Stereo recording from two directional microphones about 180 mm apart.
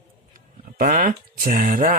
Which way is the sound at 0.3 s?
50° right (ahead or behind).